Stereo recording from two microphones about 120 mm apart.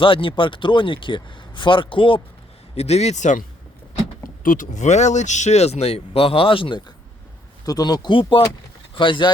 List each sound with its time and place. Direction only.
0.0 s speech: 45° left (ahead or behind)
2.7 s speech: 60° left (ahead or behind); by 3.4 s 85° left
4.5 s speech: 90° left; by 6.8 s 45° left (ahead or behind)
7.6 s speech: 30° left (ahead or behind)